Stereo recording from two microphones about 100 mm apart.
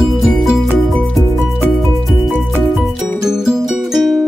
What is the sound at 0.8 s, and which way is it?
Music, centre (ahead or behind).